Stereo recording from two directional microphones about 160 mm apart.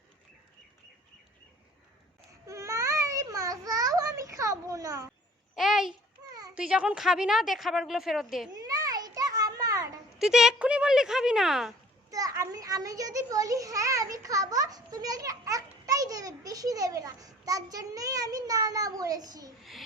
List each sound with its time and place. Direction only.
2.5 s babbling: 20° right (ahead or behind)
5.5 s a sound: centre (ahead or behind)
6.5 s a woman's voice: 5° right (ahead or behind)
8.4 s a sound: 25° right (ahead or behind)
10.2 s a woman's voice: 5° right (ahead or behind)
12.1 s a child's voice: 20° right (ahead or behind)